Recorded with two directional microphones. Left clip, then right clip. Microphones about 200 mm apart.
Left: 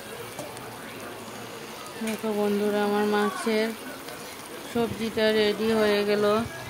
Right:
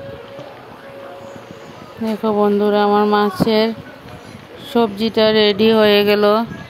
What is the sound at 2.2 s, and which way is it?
Speech, 40° right (ahead or behind).